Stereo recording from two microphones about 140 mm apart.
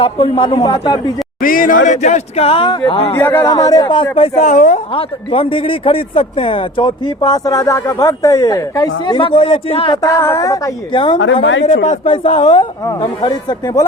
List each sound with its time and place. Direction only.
0.0 s speech: 40° left (ahead or behind)
1.4 s speech: 80° left; by 3.2 s 40° left (ahead or behind)
3.2 s speech: 15° left (ahead or behind); by 4.3 s 35° left (ahead or behind)
4.4 s a woman's voice: 65° left (ahead or behind)
4.9 s speech: 40° left (ahead or behind)
10.0 s speech: 20° left (ahead or behind)
10.9 s speech: 35° left (ahead or behind)
11.6 s speech: 55° left (ahead or behind)
12.0 s speech: 40° left (ahead or behind)
12.8 s speech: 30° left (ahead or behind)